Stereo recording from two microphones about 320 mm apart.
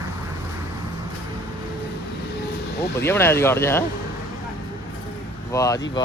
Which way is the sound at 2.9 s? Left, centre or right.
Centre.